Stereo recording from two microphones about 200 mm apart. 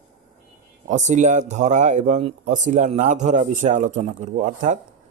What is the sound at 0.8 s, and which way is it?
Speech, 35° right (ahead or behind).